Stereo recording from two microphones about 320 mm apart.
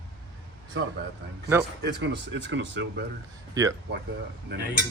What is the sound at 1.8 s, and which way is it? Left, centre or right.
Speech, right.